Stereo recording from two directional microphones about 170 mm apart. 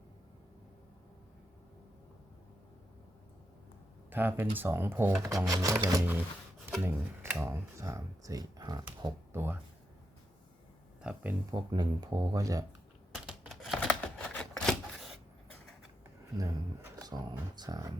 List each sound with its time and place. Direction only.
4.1 s speech: 10° right (ahead or behind)
9.3 s speech: 10° right (ahead or behind)
11.0 s speech: 5° right (ahead or behind)
11.5 s speech: 25° right (ahead or behind)
13.1 s a sound: centre (ahead or behind)
16.4 s speech: 20° right (ahead or behind)